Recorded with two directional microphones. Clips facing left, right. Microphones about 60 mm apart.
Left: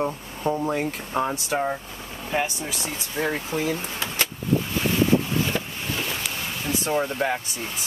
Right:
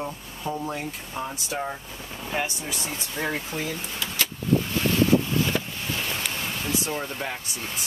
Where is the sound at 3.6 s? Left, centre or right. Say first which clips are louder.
Left 4 dB; left.